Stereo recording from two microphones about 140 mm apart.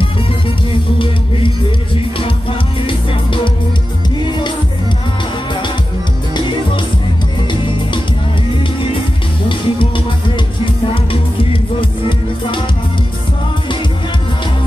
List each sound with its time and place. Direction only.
0.9 s music: 40° left (ahead or behind)
2.9 s music: 35° left (ahead or behind)
9.5 s music: 40° left (ahead or behind)